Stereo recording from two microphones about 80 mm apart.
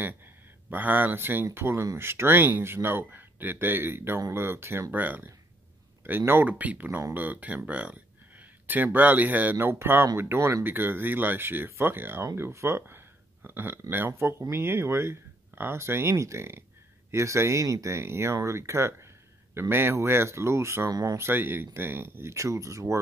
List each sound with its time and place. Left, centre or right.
0.7 s speech: right
20.9 s speech: right
21.2 s speech: right